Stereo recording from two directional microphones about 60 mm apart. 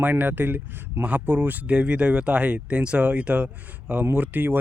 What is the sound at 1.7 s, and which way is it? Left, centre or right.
Speech, centre.